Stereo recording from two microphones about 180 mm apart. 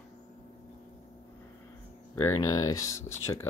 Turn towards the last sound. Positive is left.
turn(degrees=15)  # may be behind; listen again after turning